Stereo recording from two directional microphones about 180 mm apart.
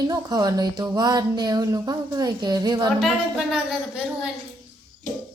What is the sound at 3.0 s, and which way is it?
Speech, centre (ahead or behind).